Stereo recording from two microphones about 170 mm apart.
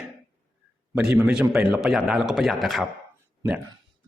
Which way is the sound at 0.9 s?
10° right (ahead or behind).